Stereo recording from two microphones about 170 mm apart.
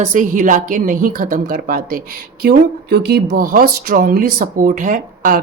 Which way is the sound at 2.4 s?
65° right (ahead or behind).